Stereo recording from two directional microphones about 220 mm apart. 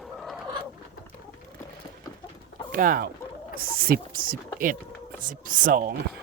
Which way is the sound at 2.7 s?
40° right (ahead or behind).